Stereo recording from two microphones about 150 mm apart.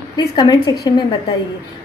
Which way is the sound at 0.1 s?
30° left (ahead or behind).